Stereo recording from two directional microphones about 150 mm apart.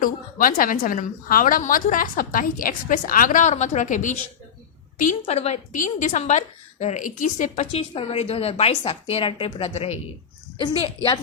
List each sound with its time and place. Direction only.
0.0 s a woman's voice: 65° left (ahead or behind)
5.2 s a woman's voice: 45° left (ahead or behind)